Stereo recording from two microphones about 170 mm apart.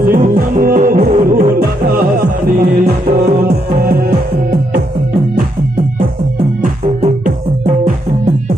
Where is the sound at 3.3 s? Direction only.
65° right (ahead or behind).